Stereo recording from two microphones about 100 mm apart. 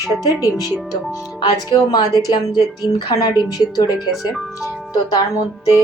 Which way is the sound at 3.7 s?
40° left (ahead or behind).